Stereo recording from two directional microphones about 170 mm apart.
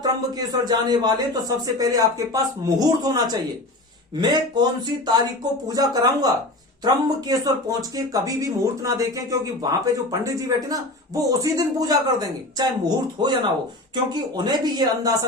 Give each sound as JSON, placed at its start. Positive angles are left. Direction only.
{"t": 0.0, "sound": "speech", "side_deg": -25}
{"t": 13.2, "sound": "speech", "side_deg": -25}